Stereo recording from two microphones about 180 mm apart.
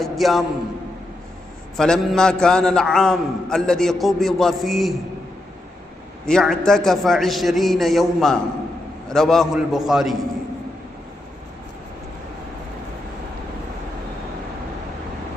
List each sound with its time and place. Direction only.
0.0 s a man's voice: centre (ahead or behind)
1.7 s a man's voice: 5° left (ahead or behind)
6.2 s a man's voice: centre (ahead or behind)